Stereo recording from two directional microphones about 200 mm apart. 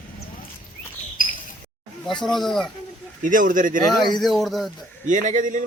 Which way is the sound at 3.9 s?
Centre (ahead or behind).